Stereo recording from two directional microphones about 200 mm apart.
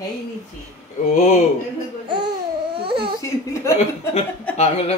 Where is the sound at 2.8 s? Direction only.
25° right (ahead or behind).